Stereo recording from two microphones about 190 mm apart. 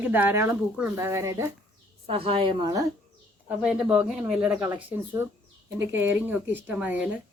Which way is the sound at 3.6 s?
5° right (ahead or behind).